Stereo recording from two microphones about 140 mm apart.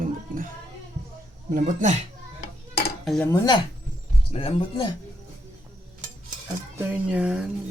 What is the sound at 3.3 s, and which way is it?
Speech, 25° left (ahead or behind).